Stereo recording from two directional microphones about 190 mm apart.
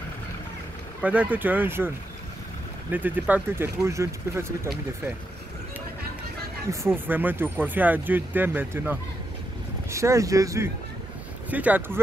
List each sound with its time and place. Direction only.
1.0 s speech: 10° right (ahead or behind)
2.9 s speech: 10° right (ahead or behind)
6.7 s speech: 15° right (ahead or behind)